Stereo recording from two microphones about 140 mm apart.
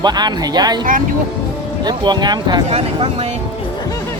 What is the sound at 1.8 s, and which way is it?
Speech, 30° right (ahead or behind).